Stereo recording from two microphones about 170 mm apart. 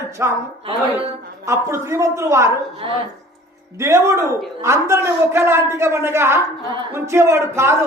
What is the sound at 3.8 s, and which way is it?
A man's voice, 15° right (ahead or behind).